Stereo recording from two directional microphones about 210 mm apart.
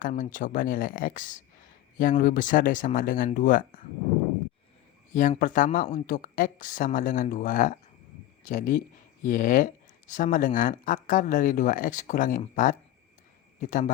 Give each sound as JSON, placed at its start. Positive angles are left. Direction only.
{"t": 0.0, "sound": "speech", "side_deg": 40}
{"t": 5.1, "sound": "speech", "side_deg": 40}